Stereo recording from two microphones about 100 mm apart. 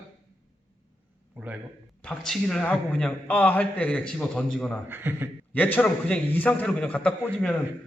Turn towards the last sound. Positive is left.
turn(degrees=15)  # may be behind; listen again after turning